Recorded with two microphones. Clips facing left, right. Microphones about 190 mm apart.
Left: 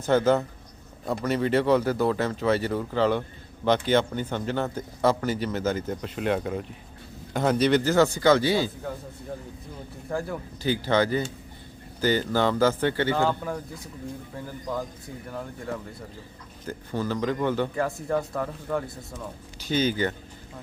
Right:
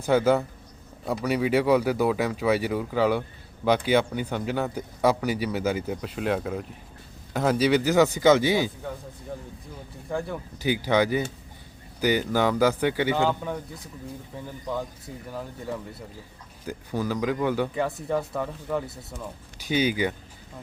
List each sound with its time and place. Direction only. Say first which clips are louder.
0.0 s speech: even; 10° right (ahead or behind)
10.1 s a man's voice: even; centre (ahead or behind)
10.6 s speech: right 1 dB; 15° right (ahead or behind)
13.1 s a man's voice: even; centre (ahead or behind)
19.6 s speech: even; 10° right (ahead or behind)